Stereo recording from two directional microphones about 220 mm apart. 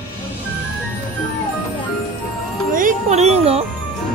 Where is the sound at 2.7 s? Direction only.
35° right (ahead or behind).